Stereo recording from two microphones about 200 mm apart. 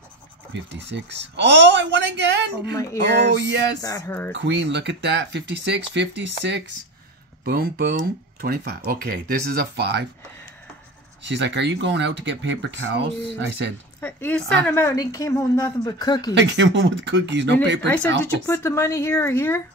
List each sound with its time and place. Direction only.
0.5 s speech: 65° right (ahead or behind)
2.7 s a woman's voice: 15° left (ahead or behind)
3.1 s speech: 60° right (ahead or behind)
3.8 s a woman's voice: 15° left (ahead or behind)
4.4 s speech: 60° right (ahead or behind)
7.4 s speech: 50° right (ahead or behind)
11.2 s speech: 65° right (ahead or behind)
14.0 s a woman's voice: 10° left (ahead or behind)
16.3 s speech: 60° right (ahead or behind)
18.2 s a woman's voice: 15° left (ahead or behind)